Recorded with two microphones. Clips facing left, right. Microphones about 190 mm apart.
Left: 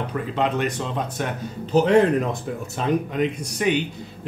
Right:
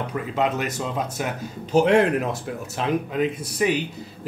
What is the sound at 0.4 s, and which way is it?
A man's voice, 5° right (ahead or behind).